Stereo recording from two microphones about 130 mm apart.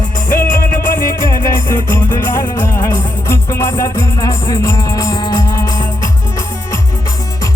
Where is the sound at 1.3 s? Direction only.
25° left (ahead or behind).